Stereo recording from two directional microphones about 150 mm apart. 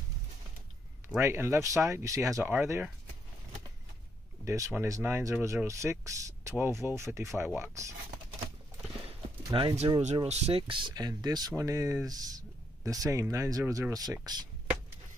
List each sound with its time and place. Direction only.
1.0 s speech: 15° right (ahead or behind)
4.5 s speech: 20° right (ahead or behind)
9.5 s speech: 35° right (ahead or behind)
10.2 s speech: 45° right (ahead or behind); by 14.4 s 25° right (ahead or behind)